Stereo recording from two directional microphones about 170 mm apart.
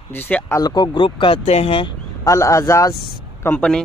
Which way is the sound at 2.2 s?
20° left (ahead or behind).